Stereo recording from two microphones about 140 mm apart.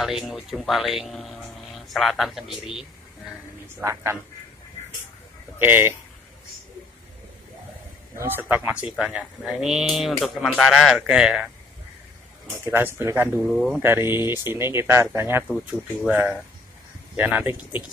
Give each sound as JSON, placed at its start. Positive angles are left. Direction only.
{"t": 0.0, "sound": "speech", "side_deg": 0}
{"t": 3.8, "sound": "speech", "side_deg": -20}
{"t": 5.6, "sound": "speech", "side_deg": -15}
{"t": 8.2, "sound": "speech", "side_deg": -15}
{"t": 12.4, "sound": "speech", "side_deg": -15}
{"t": 13.4, "sound": "speech", "side_deg": 0}
{"t": 13.8, "sound": "speech", "side_deg": -15}